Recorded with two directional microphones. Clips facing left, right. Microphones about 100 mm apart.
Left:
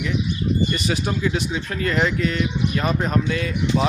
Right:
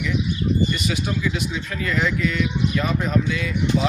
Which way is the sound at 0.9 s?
35° left (ahead or behind).